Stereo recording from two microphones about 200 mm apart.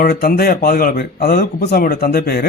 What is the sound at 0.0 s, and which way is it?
Speech, 45° left (ahead or behind).